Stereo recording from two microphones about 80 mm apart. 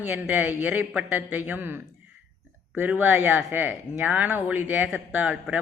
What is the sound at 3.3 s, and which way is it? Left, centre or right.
Speech, centre.